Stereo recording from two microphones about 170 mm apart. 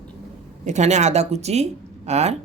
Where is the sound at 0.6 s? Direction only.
45° right (ahead or behind).